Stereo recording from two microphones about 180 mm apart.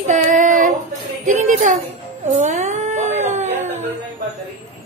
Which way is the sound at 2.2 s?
40° right (ahead or behind).